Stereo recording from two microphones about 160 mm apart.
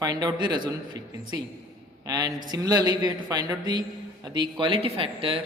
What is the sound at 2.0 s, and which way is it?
A man's voice, 25° right (ahead or behind).